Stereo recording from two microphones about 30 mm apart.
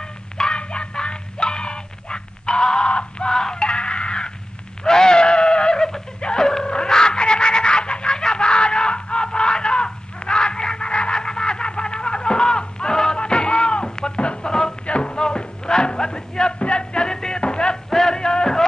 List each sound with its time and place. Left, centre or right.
0.4 s music: left
3.3 s music: centre
3.5 s music: left
4.8 s goat: centre
5.2 s neigh: left
6.2 s a sound: left
6.7 s chicken: left
13.2 s music: left
17.8 s music: centre